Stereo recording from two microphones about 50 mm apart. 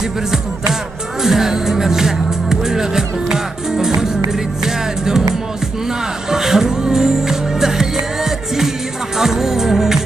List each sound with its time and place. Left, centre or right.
1.2 s music: centre
6.3 s music: centre